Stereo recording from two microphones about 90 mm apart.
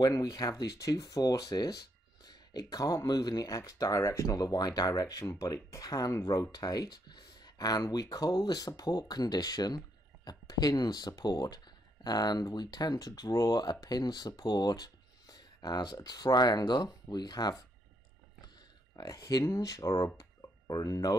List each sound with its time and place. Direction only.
0.0 s speech: 40° left (ahead or behind)
5.2 s speech: 35° left (ahead or behind)
13.6 s speech: 50° left (ahead or behind)
18.9 s speech: 45° left (ahead or behind)
20.2 s a sound: 45° left (ahead or behind)